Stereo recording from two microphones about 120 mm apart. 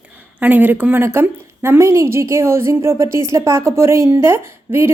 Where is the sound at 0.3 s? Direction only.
15° right (ahead or behind).